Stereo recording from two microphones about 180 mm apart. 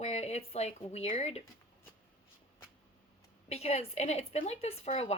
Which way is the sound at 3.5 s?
35° left (ahead or behind).